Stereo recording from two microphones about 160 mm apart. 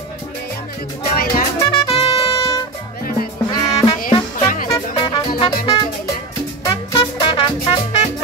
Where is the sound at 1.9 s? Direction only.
35° left (ahead or behind).